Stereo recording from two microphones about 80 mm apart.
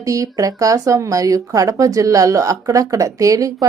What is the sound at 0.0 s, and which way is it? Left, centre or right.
Speech, right.